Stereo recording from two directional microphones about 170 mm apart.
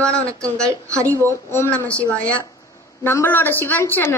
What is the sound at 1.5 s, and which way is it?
A woman's voice, 15° left (ahead or behind).